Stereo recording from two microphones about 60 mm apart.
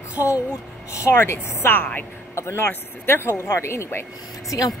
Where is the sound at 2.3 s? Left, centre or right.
Left.